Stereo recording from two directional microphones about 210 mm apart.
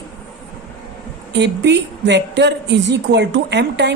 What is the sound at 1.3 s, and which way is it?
A woman's voice, 55° right (ahead or behind).